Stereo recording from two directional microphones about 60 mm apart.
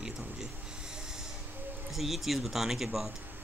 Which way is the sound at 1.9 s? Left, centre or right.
Centre.